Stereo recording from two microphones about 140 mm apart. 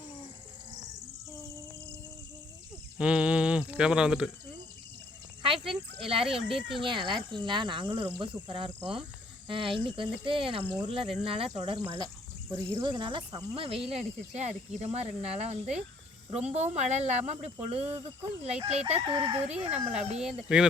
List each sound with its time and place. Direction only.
3.0 s mantra: 5° right (ahead or behind)
5.4 s snake: 40° right (ahead or behind)
6.2 s speech: 5° right (ahead or behind)
6.8 s speech: 35° right (ahead or behind)
20.5 s speech: 5° right (ahead or behind)